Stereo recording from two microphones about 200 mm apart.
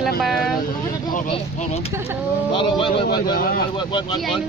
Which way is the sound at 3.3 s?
50° left (ahead or behind).